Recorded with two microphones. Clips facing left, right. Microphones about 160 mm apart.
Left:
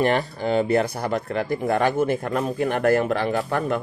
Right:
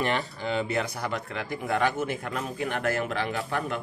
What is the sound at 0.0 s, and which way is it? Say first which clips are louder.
Speech: left 7 dB; 45° left (ahead or behind).